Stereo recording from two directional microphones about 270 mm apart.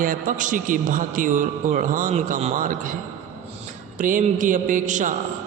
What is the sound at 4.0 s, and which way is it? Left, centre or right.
A man's voice, right.